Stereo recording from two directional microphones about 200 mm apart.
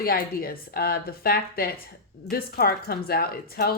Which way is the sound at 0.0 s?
50° left (ahead or behind).